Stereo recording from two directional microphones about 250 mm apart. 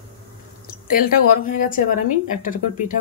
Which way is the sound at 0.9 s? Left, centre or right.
Left.